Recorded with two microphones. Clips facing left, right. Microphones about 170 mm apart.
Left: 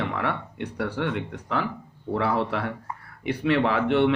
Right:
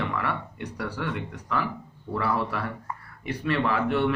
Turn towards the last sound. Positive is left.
turn(degrees=65)  # may be behind; listen again after turning